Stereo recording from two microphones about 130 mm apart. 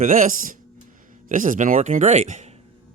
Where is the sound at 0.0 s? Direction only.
90° right; by 2.5 s 65° right (ahead or behind).